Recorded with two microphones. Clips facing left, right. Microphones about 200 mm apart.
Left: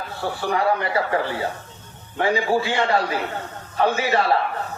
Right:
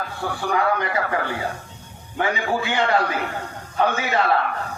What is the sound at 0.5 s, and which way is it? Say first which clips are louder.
Speech: even; 30° left (ahead or behind).